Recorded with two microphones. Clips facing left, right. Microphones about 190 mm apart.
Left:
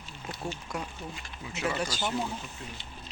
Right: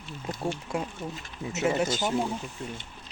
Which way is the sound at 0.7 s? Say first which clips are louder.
Right 5 dB; 25° right (ahead or behind).